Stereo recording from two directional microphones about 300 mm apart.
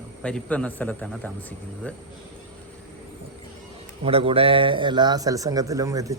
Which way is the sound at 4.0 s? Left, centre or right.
Centre.